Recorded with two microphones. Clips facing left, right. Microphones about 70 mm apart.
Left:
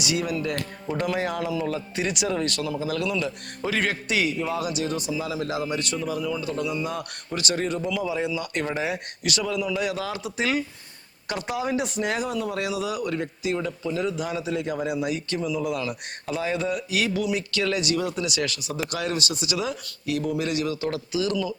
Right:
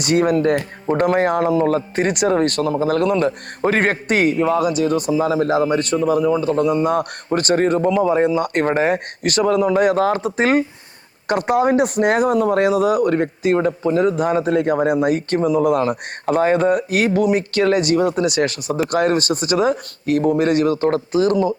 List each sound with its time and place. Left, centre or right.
0.0 s speech: right